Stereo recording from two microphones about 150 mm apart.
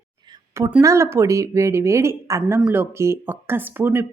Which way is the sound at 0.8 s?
20° right (ahead or behind).